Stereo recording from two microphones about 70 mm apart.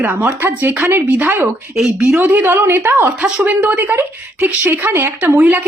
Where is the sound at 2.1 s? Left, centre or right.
Right.